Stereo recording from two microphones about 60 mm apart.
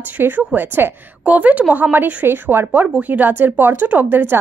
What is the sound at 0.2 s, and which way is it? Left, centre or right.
A woman's voice, right.